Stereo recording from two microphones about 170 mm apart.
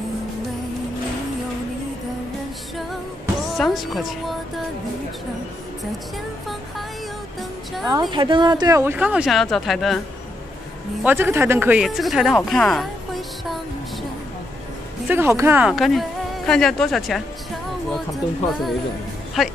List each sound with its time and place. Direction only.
2.9 s music: centre (ahead or behind)
7.8 s a woman's voice: 25° right (ahead or behind); by 9.9 s centre (ahead or behind)
11.1 s speech: 10° right (ahead or behind)
15.0 s a woman's voice: 15° right (ahead or behind)
15.7 s a woman's voice: centre (ahead or behind)
19.4 s music: centre (ahead or behind)